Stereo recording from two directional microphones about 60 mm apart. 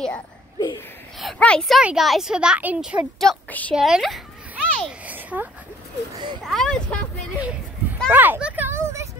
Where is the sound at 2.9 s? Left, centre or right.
Right.